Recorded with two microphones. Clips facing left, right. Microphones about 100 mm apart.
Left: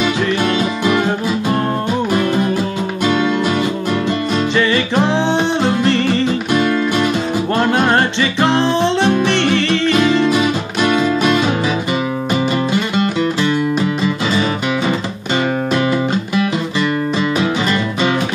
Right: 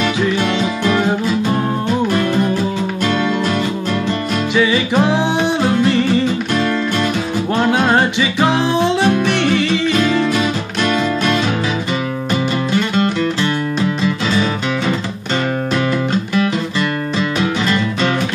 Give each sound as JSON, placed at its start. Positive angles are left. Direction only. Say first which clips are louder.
{"t": 0.0, "sound": "music", "louder": "even", "side_deg": 5}
{"t": 4.6, "sound": "music", "louder": "right 3 dB", "side_deg": -5}
{"t": 6.5, "sound": "music", "louder": "left 2 dB", "side_deg": 5}
{"t": 12.7, "sound": "music", "louder": "even", "side_deg": 10}
{"t": 15.7, "sound": "music", "louder": "even", "side_deg": 10}